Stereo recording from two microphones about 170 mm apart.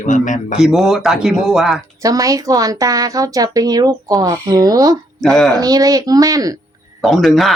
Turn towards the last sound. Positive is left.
turn(degrees=0)  # may be behind; listen again after turning